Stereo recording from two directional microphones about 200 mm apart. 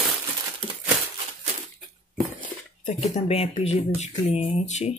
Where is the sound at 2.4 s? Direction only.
40° left (ahead or behind).